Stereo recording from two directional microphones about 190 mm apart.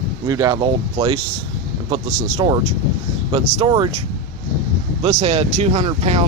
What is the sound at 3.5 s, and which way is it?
Speech, 25° right (ahead or behind).